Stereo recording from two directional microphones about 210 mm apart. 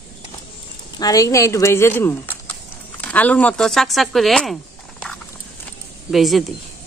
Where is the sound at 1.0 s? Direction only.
15° left (ahead or behind); by 4.5 s centre (ahead or behind).